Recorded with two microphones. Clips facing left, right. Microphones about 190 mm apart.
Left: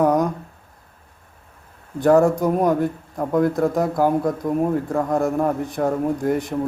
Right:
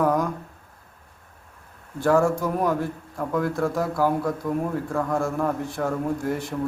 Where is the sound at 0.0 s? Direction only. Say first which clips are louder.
Left 4 dB; 20° left (ahead or behind).